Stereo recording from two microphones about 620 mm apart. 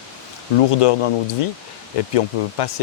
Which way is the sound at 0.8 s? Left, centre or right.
Left.